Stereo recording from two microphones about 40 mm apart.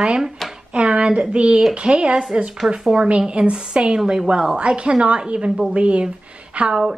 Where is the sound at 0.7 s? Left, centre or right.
Right.